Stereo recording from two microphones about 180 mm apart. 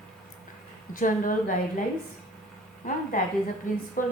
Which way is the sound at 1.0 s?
45° left (ahead or behind).